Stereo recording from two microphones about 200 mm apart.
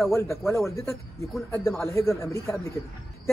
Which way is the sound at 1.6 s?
10° left (ahead or behind).